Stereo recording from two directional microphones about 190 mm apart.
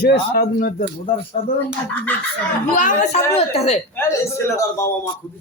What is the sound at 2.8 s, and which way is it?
Speech, 45° left (ahead or behind).